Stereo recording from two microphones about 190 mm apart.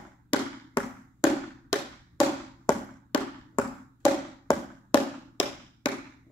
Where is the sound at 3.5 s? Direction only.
20° left (ahead or behind).